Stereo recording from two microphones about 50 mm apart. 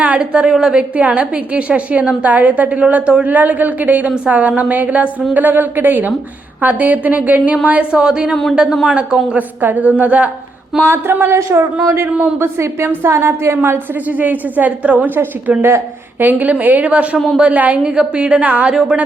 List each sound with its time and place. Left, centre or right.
0.0 s a woman's voice: right
0.4 s a woman's voice: centre
0.8 s a woman's voice: right
2.9 s a woman's voice: centre
3.2 s a woman's voice: right; by 8.4 s centre
8.7 s a woman's voice: centre
9.6 s a woman's voice: right
10.8 s speech: right
11.3 s a woman's voice: right
14.2 s a woman's voice: right